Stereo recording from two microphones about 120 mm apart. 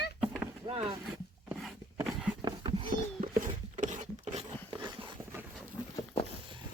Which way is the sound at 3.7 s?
90° right.